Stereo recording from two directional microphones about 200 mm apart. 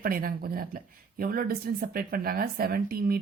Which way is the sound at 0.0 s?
45° right (ahead or behind).